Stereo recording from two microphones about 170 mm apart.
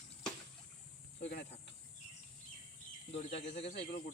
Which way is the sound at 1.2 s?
80° left.